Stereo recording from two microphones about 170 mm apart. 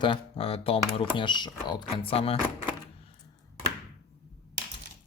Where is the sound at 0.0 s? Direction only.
30° left (ahead or behind).